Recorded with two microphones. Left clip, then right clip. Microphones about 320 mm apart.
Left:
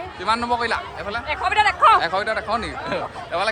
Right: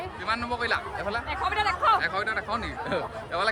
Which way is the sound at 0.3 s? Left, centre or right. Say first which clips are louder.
Left 7 dB; centre.